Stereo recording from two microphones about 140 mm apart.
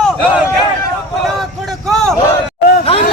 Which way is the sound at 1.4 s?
5° left (ahead or behind).